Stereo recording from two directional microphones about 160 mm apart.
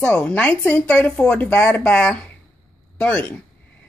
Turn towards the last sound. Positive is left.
turn(degrees=5)  # may be behind; listen again after turning